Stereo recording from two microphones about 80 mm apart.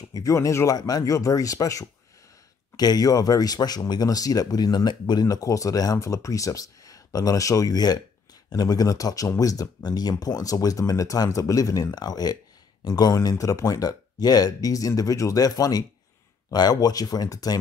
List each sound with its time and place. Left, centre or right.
0.1 s speech: left
0.7 s speech: left
5.2 s speech: left
9.8 s speech: left